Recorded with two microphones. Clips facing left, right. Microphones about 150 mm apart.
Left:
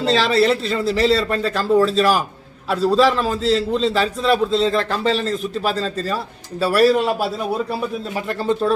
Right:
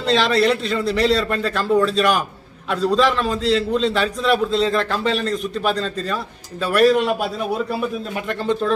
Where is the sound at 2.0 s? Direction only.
35° left (ahead or behind).